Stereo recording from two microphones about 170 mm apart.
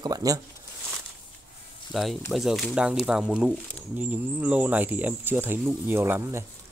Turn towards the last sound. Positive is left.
turn(degrees=-15)  # may be behind; listen again after turning